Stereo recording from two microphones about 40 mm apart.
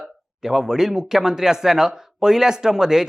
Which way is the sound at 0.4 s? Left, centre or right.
Centre.